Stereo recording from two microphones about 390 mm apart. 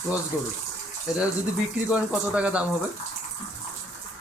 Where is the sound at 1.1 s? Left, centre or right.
Centre.